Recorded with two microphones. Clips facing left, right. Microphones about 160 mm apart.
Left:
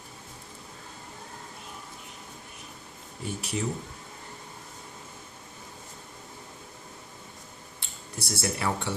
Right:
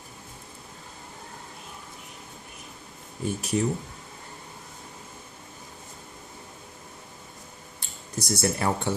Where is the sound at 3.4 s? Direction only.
45° right (ahead or behind).